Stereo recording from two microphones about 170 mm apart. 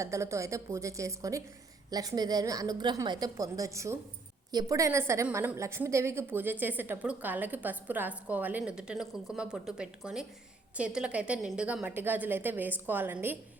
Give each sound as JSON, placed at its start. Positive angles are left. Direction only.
{"t": 0.0, "sound": "a woman's voice", "side_deg": -15}